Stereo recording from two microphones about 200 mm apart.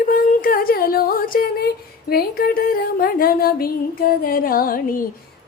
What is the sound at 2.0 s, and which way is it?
Female singing, 50° left (ahead or behind).